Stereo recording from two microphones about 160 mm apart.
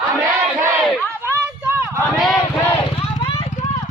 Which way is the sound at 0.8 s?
Centre (ahead or behind).